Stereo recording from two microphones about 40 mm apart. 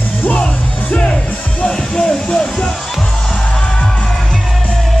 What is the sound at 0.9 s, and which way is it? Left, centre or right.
Music, left.